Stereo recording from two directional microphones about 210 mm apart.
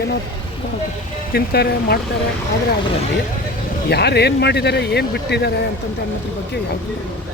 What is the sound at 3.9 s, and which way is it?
Speech, 50° left (ahead or behind).